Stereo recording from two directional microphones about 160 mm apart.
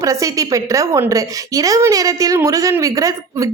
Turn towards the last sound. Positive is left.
turn(degrees=-20)  # may be behind; listen again after turning